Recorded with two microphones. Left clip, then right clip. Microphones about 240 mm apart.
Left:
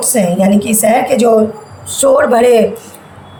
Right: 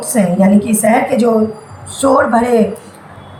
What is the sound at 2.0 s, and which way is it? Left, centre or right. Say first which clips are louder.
Speech: left 2 dB; left.